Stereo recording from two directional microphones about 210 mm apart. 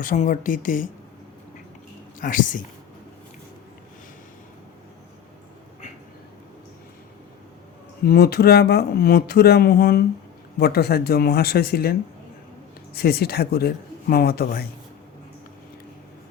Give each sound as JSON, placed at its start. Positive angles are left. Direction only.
{"t": 0.0, "sound": "speech", "side_deg": 40}
{"t": 2.2, "sound": "speech", "side_deg": 40}
{"t": 8.0, "sound": "speech", "side_deg": 45}